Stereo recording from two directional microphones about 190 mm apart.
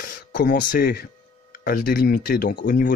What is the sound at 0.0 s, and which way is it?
Speech, 45° left (ahead or behind).